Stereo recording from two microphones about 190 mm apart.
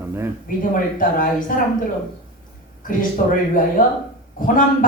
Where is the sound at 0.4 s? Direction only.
45° left (ahead or behind).